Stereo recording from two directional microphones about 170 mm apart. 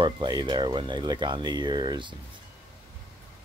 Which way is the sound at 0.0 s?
25° right (ahead or behind).